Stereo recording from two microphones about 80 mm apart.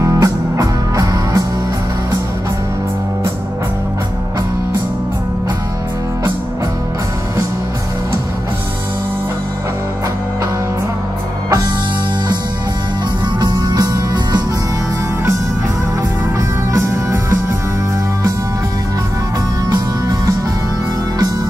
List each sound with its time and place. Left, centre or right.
0.0 s music: right
13.4 s music: right
16.7 s music: right